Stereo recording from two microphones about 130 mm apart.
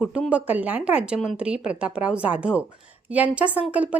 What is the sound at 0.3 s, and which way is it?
A woman's voice, 10° right (ahead or behind).